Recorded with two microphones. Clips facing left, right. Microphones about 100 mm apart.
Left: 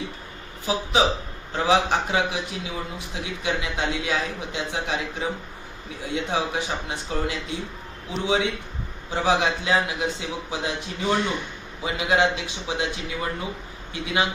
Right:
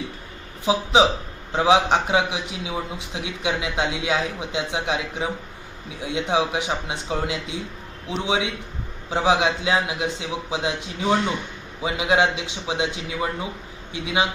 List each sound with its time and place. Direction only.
0.6 s a man's voice: 20° right (ahead or behind)
6.0 s a man's voice: 15° right (ahead or behind)
13.9 s a man's voice: 15° right (ahead or behind)